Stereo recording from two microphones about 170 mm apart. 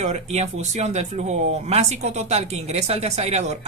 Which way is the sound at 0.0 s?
40° right (ahead or behind).